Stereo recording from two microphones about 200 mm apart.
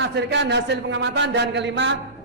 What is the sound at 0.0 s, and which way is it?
Speech, 60° right (ahead or behind).